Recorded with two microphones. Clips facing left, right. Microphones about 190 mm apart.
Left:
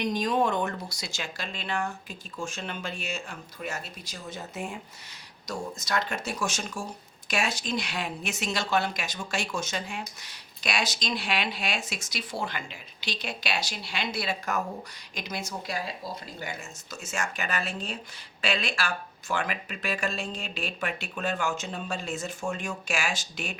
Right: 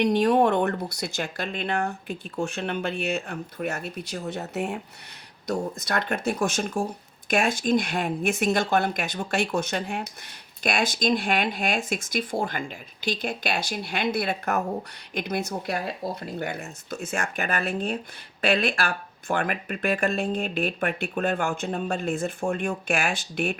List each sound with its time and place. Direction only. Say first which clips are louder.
0.0 s speech: right 6 dB; 65° right (ahead or behind)
5.5 s speech: right 5 dB; 55° right (ahead or behind)